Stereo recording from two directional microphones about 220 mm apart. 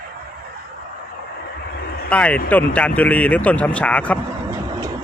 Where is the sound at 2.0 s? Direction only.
5° left (ahead or behind).